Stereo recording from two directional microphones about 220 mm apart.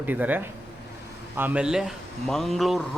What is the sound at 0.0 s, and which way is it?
A man's voice, 10° right (ahead or behind).